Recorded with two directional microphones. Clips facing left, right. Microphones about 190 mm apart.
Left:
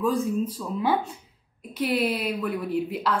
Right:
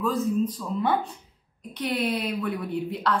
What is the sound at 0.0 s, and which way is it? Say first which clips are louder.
A woman's voice: even; 10° left (ahead or behind).